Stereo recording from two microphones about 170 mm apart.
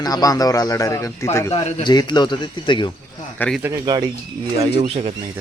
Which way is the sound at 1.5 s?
40° left (ahead or behind).